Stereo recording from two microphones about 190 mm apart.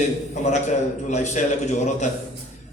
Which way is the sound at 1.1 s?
40° left (ahead or behind).